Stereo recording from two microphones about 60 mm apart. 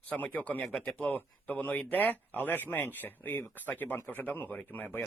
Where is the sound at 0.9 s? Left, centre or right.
Left.